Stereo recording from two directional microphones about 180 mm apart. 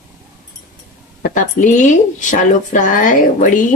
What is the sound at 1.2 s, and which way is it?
Speech, 45° left (ahead or behind).